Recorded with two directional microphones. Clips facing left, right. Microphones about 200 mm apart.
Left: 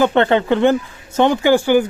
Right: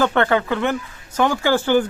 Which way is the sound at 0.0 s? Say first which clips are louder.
Left 4 dB; 20° left (ahead or behind).